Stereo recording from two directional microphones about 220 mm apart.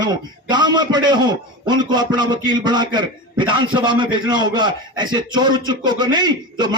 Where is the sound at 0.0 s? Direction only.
20° right (ahead or behind).